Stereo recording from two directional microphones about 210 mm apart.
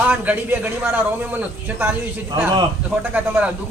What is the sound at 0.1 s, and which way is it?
A man's voice, 5° right (ahead or behind).